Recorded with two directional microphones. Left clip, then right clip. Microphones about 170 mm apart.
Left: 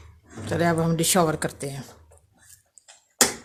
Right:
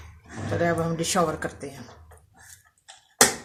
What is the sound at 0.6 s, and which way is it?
Speech, 65° left (ahead or behind).